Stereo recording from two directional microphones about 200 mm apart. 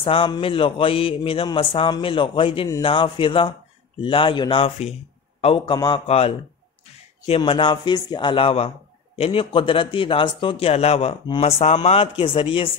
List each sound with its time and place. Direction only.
0.0 s mantra: 25° left (ahead or behind)